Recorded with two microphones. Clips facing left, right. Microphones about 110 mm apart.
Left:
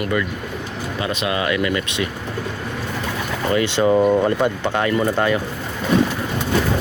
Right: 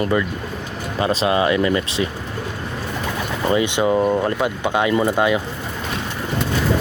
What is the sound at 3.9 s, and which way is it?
Speech, centre (ahead or behind).